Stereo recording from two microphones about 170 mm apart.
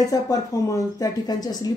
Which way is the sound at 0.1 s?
20° left (ahead or behind).